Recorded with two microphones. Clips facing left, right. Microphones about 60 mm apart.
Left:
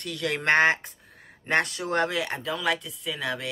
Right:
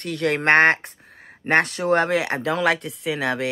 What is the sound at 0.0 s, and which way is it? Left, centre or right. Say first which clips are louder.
Speech: right 6 dB; right.